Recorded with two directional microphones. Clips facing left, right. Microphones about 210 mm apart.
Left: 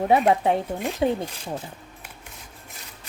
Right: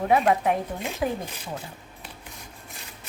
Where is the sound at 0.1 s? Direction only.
30° left (ahead or behind).